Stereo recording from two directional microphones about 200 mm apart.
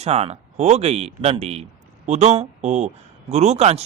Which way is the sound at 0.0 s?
30° right (ahead or behind).